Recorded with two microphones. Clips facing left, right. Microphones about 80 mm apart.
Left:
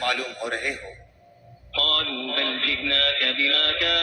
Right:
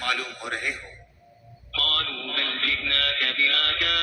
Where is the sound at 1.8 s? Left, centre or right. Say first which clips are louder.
Left 2 dB; left.